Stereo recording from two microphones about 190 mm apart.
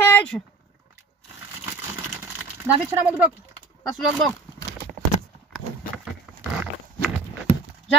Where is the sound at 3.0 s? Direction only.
5° right (ahead or behind).